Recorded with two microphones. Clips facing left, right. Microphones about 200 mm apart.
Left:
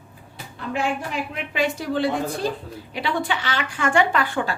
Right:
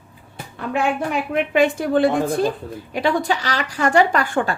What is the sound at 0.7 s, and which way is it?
A woman's voice, 55° right (ahead or behind).